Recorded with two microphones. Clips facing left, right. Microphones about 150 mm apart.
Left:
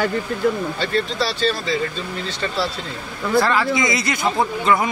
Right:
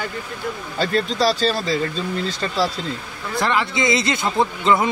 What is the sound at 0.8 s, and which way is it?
Speech, 40° right (ahead or behind).